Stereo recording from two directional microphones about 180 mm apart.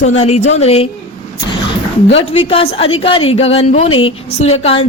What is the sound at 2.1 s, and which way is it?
Speech, 35° left (ahead or behind).